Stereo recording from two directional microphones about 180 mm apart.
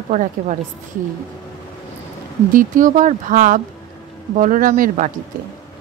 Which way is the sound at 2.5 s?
45° right (ahead or behind).